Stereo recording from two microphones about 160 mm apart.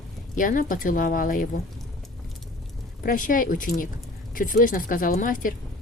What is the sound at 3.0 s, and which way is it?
A woman's voice, 60° left (ahead or behind).